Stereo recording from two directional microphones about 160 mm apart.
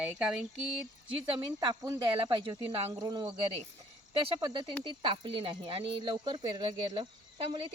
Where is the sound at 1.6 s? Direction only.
25° right (ahead or behind).